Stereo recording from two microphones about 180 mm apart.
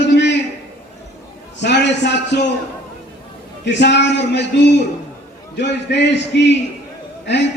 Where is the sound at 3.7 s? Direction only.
70° left (ahead or behind).